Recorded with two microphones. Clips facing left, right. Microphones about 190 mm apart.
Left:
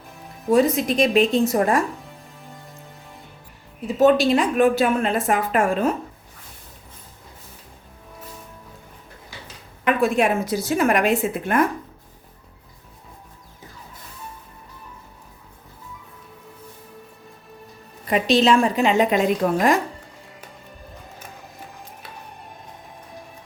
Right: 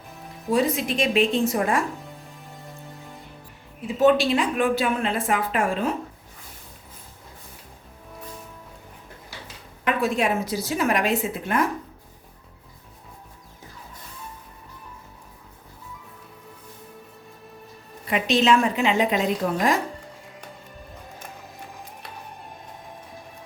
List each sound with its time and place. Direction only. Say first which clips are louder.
0.5 s speech: left 5 dB; 40° left (ahead or behind)
3.8 s a woman's voice: left 3 dB; 40° left (ahead or behind)
9.8 s a woman's voice: left 4 dB; 55° left (ahead or behind)
18.1 s speech: left 3 dB; 35° left (ahead or behind)
19.4 s speech: left 4 dB; 55° left (ahead or behind)